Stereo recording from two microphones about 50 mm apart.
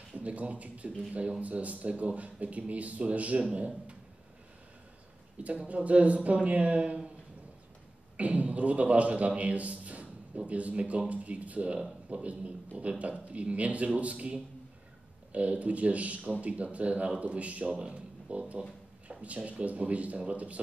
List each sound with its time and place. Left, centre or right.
0.1 s speech: right
5.4 s speech: right
8.2 s a man's voice: right